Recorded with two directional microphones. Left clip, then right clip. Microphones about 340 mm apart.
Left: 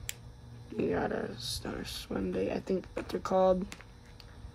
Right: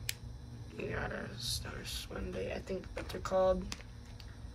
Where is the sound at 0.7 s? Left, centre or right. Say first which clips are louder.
Left 8 dB; centre.